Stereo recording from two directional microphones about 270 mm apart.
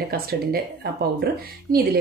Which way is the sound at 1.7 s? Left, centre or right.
Right.